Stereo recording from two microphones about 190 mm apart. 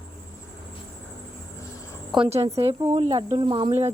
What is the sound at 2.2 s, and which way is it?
Speech, 35° right (ahead or behind).